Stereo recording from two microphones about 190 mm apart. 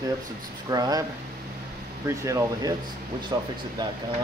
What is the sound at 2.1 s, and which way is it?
Speech, 15° right (ahead or behind).